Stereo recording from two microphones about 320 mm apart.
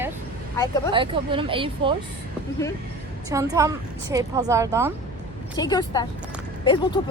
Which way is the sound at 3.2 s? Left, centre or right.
Centre.